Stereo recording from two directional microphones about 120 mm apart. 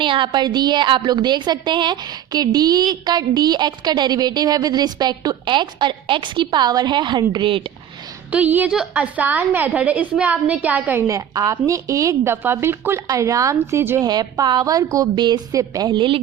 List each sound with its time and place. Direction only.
0.0 s a woman's voice: 45° right (ahead or behind)
8.3 s a woman's voice: 15° right (ahead or behind)
14.0 s a woman's voice: 35° right (ahead or behind)